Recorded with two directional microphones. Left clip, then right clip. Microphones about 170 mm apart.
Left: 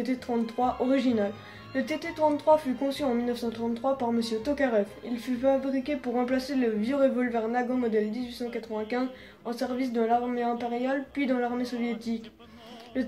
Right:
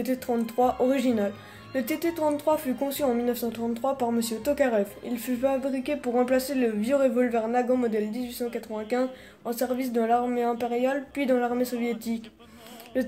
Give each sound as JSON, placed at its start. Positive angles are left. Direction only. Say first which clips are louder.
{"t": 0.0, "sound": "speech", "louder": "right 2 dB", "side_deg": -60}
{"t": 12.9, "sound": "music", "louder": "right 4 dB", "side_deg": -60}